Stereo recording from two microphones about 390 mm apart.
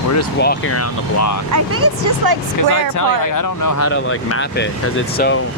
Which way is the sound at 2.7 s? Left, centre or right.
Left.